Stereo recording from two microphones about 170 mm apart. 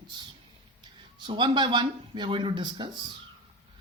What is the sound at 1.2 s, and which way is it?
Speech, 30° right (ahead or behind).